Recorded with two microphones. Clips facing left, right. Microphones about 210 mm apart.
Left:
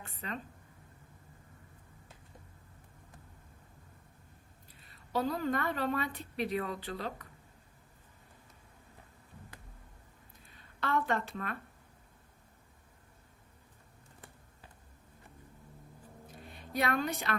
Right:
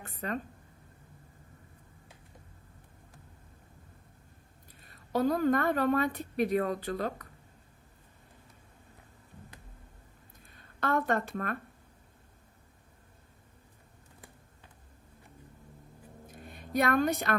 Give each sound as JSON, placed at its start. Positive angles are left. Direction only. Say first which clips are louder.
{"t": 0.0, "sound": "speech", "louder": "right 6 dB", "side_deg": -45}
{"t": 4.8, "sound": "a woman's voice", "louder": "right 5 dB", "side_deg": -50}
{"t": 10.5, "sound": "a woman's voice", "louder": "right 3 dB", "side_deg": -50}
{"t": 16.3, "sound": "a sound", "louder": "right 6 dB", "side_deg": -50}